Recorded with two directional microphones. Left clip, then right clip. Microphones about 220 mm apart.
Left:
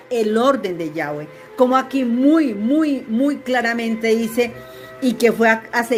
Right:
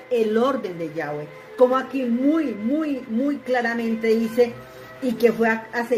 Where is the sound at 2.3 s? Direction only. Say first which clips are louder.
Left 6 dB; 45° left (ahead or behind).